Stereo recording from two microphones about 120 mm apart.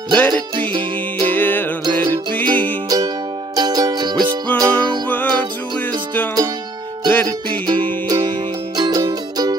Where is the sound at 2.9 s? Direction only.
35° right (ahead or behind).